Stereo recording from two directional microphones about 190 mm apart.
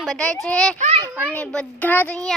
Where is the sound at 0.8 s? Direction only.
35° right (ahead or behind).